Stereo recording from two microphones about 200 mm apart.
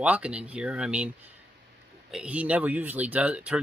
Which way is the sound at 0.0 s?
5° right (ahead or behind).